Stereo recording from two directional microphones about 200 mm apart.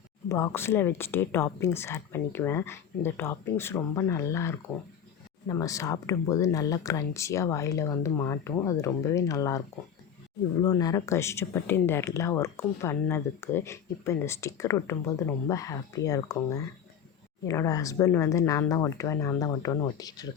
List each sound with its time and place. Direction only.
0.3 s speech: 15° left (ahead or behind)